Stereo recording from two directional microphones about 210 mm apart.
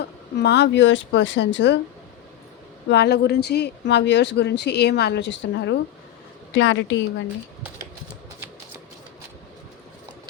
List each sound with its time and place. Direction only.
0.0 s speech: 55° left (ahead or behind)
2.9 s speech: 50° left (ahead or behind)